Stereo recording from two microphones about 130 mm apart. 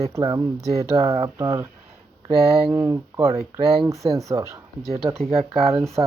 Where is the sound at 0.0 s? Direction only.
30° right (ahead or behind).